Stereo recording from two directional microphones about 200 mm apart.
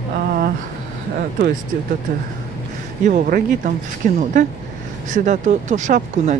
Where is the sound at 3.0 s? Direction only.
40° right (ahead or behind).